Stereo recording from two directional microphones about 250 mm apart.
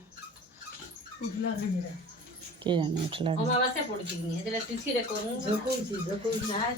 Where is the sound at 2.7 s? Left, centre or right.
Centre.